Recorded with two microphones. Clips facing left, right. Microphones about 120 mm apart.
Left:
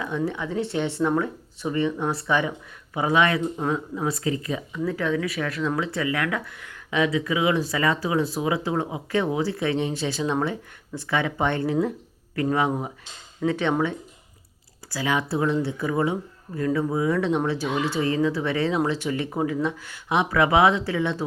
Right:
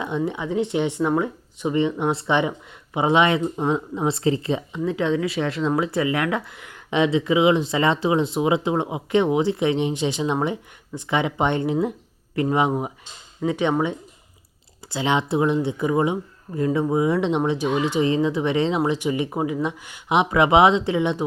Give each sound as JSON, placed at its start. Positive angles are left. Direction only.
{"t": 0.0, "sound": "speech", "side_deg": -20}